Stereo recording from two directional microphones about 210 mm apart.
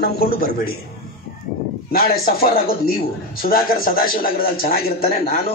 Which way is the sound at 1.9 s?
45° left (ahead or behind).